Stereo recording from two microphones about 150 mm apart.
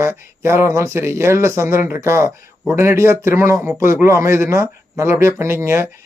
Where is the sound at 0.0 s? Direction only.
15° right (ahead or behind).